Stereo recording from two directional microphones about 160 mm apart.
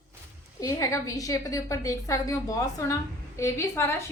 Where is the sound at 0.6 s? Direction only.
20° left (ahead or behind).